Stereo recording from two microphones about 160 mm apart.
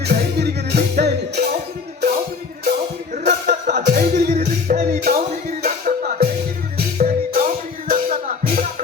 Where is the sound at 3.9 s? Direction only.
50° right (ahead or behind).